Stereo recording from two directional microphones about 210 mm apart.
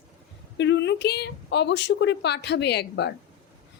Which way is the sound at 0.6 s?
55° left (ahead or behind).